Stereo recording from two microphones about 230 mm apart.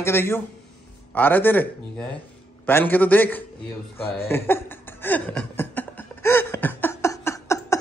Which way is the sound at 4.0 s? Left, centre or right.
Centre.